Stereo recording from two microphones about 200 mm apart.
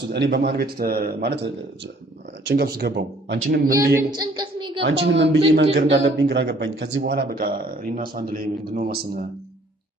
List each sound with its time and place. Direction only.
0.1 s a man's voice: 55° right (ahead or behind)
3.7 s a woman's voice: 15° right (ahead or behind)
4.1 s a sound: 20° right (ahead or behind)
4.8 s a man's voice: 60° right (ahead or behind); by 9.2 s 45° right (ahead or behind)